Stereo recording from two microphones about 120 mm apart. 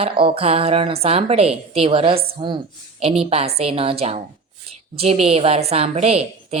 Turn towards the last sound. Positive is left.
turn(degrees=-60)  # may be behind; listen again after turning